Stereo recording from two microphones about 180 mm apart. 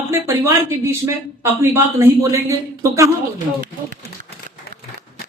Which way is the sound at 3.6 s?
50° right (ahead or behind).